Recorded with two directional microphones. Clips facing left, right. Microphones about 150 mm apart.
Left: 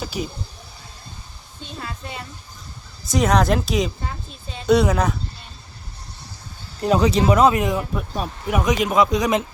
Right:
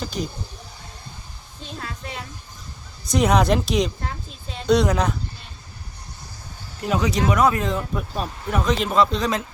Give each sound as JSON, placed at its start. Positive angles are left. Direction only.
{"t": 0.0, "sound": "a sound", "side_deg": 5}
{"t": 1.6, "sound": "music", "side_deg": 0}
{"t": 3.0, "sound": "speech", "side_deg": 0}
{"t": 6.8, "sound": "speech", "side_deg": 35}